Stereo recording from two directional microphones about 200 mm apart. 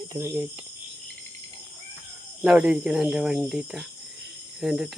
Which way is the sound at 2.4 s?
5° right (ahead or behind).